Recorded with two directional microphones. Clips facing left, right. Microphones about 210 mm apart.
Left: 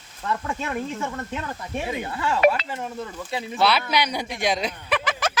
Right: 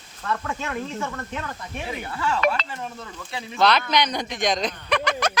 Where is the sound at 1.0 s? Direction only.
20° left (ahead or behind).